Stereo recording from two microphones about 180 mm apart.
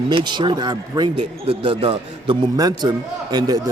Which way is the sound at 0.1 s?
25° right (ahead or behind).